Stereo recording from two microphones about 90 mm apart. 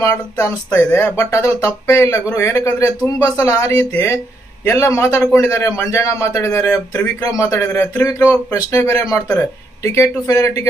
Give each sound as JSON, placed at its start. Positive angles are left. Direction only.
{"t": 0.0, "sound": "speech", "side_deg": 30}